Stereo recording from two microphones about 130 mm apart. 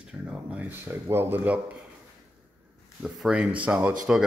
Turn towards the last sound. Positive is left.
turn(degrees=-10)  # may be behind; listen again after turning